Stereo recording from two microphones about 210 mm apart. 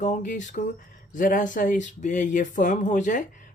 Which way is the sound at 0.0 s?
40° left (ahead or behind).